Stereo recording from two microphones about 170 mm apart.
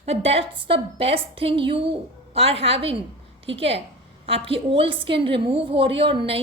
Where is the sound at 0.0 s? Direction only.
35° right (ahead or behind).